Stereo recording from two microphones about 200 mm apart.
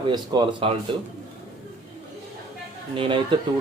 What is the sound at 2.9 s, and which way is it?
Speech, 25° right (ahead or behind).